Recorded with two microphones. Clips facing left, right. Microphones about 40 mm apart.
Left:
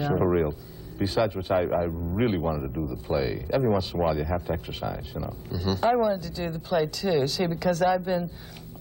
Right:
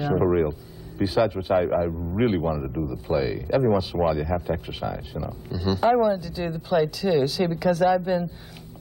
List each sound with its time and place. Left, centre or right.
0.0 s speech: centre